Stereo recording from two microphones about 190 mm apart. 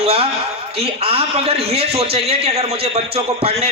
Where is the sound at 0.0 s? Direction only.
30° right (ahead or behind).